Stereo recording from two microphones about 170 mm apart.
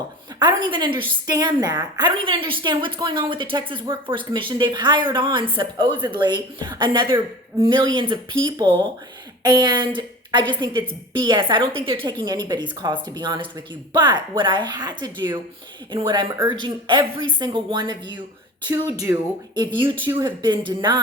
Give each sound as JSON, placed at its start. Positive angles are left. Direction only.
{"t": 0.3, "sound": "a woman's voice", "side_deg": -25}
{"t": 20.2, "sound": "a woman's voice", "side_deg": -25}